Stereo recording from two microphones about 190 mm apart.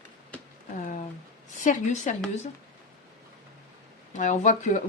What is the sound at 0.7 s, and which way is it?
Speech, 45° left (ahead or behind).